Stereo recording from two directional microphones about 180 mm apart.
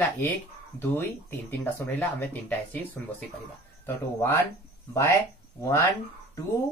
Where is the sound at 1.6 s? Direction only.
10° left (ahead or behind).